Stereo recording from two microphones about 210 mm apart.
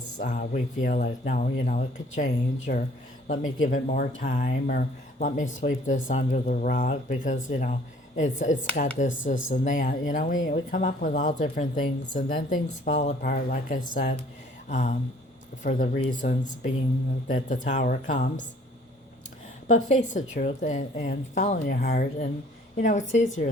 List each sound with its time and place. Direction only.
0.2 s speech: 40° left (ahead or behind)
19.6 s speech: 35° left (ahead or behind)